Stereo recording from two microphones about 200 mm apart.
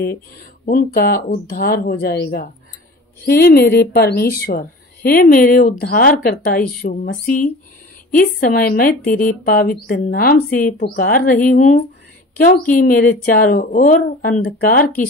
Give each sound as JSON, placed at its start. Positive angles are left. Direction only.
{"t": 0.7, "sound": "speech", "side_deg": 45}